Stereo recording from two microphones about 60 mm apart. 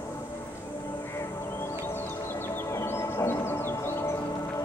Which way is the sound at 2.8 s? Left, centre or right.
Left.